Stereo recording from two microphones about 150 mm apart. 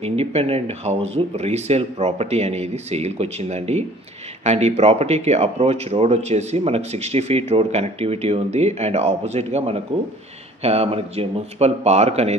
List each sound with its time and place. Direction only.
0.0 s speech: 45° right (ahead or behind)